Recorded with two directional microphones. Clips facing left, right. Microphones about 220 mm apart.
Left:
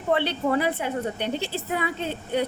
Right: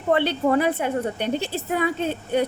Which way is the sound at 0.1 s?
50° right (ahead or behind).